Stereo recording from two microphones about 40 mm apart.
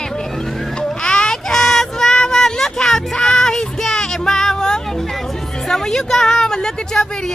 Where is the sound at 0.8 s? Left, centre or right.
Centre.